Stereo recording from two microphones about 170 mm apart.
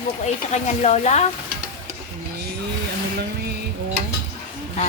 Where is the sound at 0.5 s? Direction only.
40° left (ahead or behind).